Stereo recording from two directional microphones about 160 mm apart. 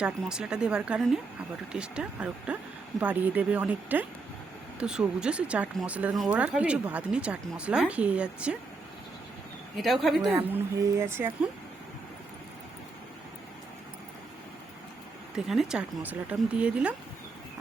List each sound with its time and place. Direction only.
0.3 s speech: 5° right (ahead or behind)
9.7 s speech: centre (ahead or behind)
10.3 s speech: 15° right (ahead or behind)
15.4 s speech: 5° right (ahead or behind)